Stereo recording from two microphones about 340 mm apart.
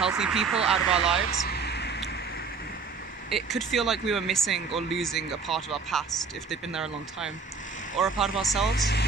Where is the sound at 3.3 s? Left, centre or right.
Centre.